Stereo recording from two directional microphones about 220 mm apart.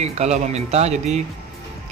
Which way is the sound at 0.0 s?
30° right (ahead or behind).